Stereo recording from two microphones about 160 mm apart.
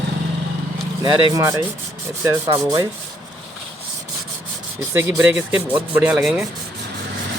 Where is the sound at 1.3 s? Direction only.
20° right (ahead or behind).